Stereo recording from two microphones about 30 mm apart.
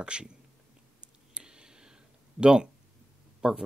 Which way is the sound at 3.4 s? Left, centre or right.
Right.